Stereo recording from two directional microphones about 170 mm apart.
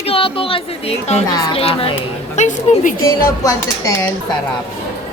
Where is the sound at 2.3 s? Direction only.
45° left (ahead or behind).